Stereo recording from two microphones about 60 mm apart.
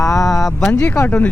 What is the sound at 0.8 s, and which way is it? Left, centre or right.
Speech, left.